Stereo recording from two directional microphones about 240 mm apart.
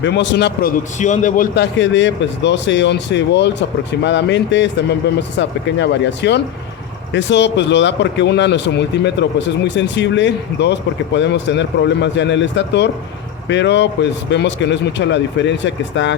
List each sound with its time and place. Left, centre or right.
0.0 s speech: left
0.9 s a man's voice: left
1.8 s speech: left